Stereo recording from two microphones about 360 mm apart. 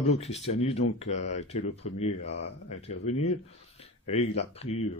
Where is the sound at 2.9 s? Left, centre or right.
Centre.